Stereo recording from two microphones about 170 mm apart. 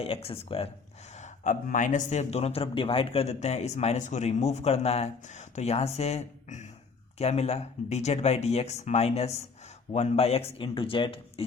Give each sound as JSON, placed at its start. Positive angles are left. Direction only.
{"t": 0.0, "sound": "a man's voice", "side_deg": 35}
{"t": 1.1, "sound": "a man's voice", "side_deg": 45}